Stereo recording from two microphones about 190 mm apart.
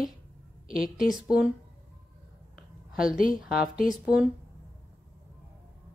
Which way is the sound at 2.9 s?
5° right (ahead or behind).